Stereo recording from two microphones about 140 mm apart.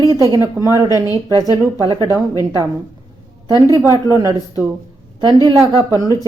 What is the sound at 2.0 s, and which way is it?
A woman's voice, 25° left (ahead or behind).